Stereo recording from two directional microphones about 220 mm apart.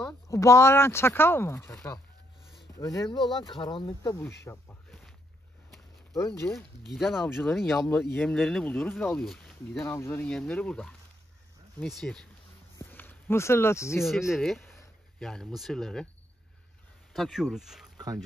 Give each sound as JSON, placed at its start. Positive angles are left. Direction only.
{"t": 0.3, "sound": "speech", "side_deg": 15}
{"t": 4.5, "sound": "snake", "side_deg": 0}
{"t": 6.1, "sound": "speech", "side_deg": 10}
{"t": 6.9, "sound": "speech", "side_deg": 0}
{"t": 12.7, "sound": "a sound", "side_deg": 10}
{"t": 14.0, "sound": "speech", "side_deg": 0}
{"t": 17.1, "sound": "speech", "side_deg": 0}